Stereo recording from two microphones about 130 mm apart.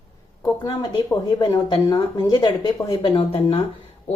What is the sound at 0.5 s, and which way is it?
Speech, 35° left (ahead or behind).